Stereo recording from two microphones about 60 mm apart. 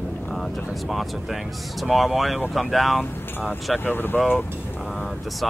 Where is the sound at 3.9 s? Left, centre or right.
Left.